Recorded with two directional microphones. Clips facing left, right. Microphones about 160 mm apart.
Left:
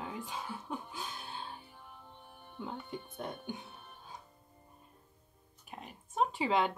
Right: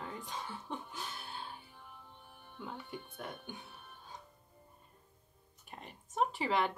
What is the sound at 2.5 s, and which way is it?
Speech, 20° left (ahead or behind).